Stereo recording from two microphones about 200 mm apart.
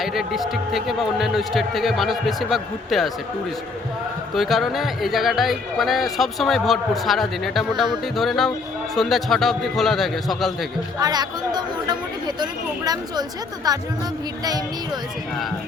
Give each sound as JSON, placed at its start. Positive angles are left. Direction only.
{"t": 0.0, "sound": "speech", "side_deg": 0}
{"t": 4.4, "sound": "speech", "side_deg": 0}
{"t": 11.0, "sound": "speech", "side_deg": -20}